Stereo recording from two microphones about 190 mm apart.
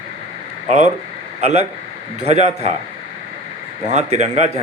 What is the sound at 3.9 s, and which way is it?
Speech, 40° right (ahead or behind).